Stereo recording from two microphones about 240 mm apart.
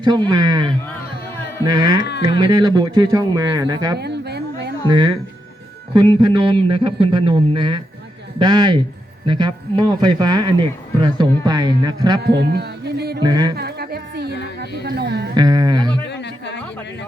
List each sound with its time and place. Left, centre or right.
0.0 s speech: centre
3.9 s a sound: right
4.9 s a man's voice: centre
12.2 s speech: right
13.2 s speech: centre
13.6 s music: right
14.8 s speech: right
15.4 s a sound: centre
15.9 s a sound: left